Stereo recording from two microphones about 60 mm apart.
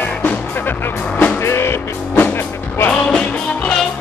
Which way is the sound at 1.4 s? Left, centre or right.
Left.